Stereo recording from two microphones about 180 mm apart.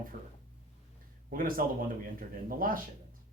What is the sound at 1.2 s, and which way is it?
Speech, 50° right (ahead or behind).